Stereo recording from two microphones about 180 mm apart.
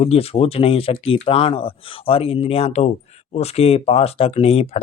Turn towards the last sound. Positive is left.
turn(degrees=35)  # may be behind; listen again after turning